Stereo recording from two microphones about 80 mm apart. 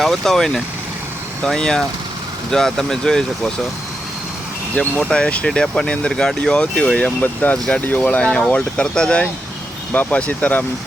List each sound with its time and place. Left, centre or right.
0.0 s speech: centre
4.7 s speech: centre